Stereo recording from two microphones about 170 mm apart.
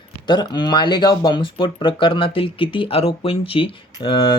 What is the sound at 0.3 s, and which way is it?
Speech, 25° left (ahead or behind).